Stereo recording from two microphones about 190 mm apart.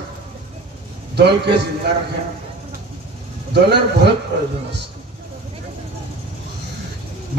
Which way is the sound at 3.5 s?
60° right (ahead or behind).